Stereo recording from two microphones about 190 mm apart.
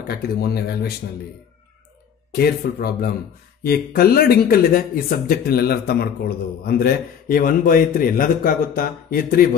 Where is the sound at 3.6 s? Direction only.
55° left (ahead or behind).